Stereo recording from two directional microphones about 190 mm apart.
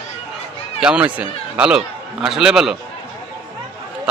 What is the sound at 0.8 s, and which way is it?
Speech, 5° right (ahead or behind).